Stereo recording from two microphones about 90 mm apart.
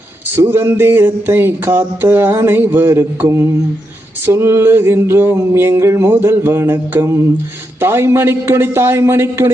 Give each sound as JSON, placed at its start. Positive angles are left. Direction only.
{"t": 0.3, "sound": "mantra", "side_deg": -25}